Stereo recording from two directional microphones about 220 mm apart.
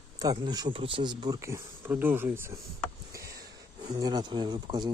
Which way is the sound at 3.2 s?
45° right (ahead or behind).